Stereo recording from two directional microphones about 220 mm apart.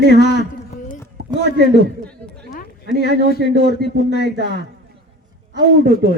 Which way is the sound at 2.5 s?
45° left (ahead or behind).